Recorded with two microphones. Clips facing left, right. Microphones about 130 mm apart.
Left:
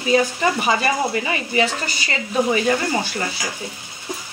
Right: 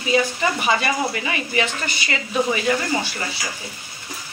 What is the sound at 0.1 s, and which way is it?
Speech, 35° left (ahead or behind).